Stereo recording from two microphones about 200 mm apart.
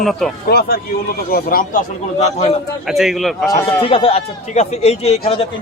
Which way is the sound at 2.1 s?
35° left (ahead or behind).